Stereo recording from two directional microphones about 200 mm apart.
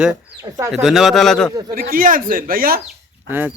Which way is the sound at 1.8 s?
45° right (ahead or behind).